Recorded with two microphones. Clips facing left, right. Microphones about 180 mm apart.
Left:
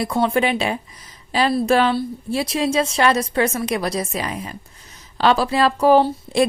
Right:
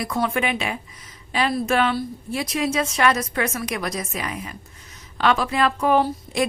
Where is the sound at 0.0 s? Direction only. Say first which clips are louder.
Left 5 dB; 30° left (ahead or behind).